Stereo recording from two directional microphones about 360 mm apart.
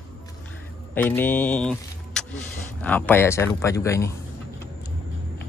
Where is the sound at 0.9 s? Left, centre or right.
Centre.